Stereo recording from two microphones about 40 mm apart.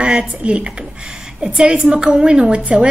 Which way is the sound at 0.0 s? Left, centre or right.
Right.